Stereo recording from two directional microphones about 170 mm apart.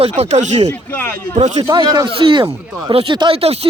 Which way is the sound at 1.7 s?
25° right (ahead or behind).